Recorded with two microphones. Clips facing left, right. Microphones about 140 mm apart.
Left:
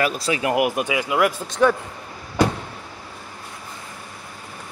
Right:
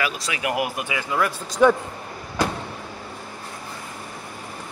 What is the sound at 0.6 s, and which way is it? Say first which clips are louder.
Speech: left 5 dB; 20° left (ahead or behind).